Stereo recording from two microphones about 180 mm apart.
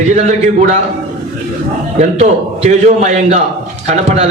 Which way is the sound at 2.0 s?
40° right (ahead or behind).